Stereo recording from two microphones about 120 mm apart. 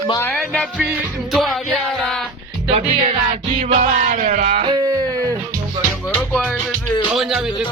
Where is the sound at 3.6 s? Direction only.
85° right.